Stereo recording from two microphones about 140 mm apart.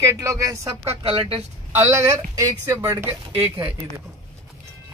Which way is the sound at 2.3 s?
20° right (ahead or behind).